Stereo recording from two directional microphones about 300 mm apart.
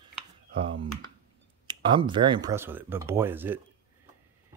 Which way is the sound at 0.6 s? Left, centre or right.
Centre.